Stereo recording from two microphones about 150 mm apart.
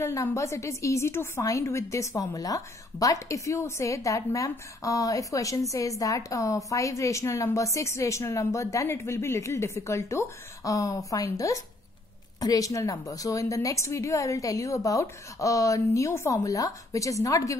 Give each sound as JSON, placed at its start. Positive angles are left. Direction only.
{"t": 0.0, "sound": "a woman's voice", "side_deg": 20}